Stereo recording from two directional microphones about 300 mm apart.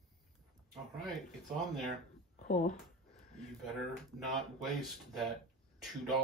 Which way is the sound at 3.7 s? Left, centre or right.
Centre.